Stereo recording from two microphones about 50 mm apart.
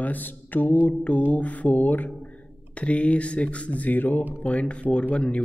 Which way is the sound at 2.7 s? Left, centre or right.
Left.